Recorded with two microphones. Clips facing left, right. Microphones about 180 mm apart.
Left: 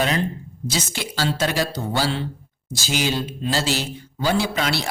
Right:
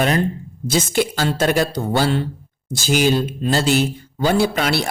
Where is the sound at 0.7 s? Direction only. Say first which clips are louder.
Right 10 dB; 50° right (ahead or behind).